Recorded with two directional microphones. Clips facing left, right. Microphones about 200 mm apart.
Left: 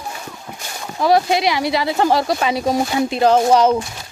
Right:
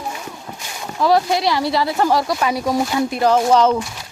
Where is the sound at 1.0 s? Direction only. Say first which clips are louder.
Left 1 dB; 20° left (ahead or behind).